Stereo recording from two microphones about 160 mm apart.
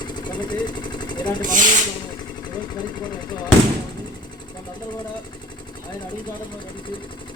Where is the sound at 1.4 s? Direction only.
55° right (ahead or behind).